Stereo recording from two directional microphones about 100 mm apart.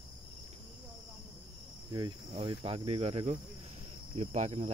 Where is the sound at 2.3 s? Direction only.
70° right (ahead or behind).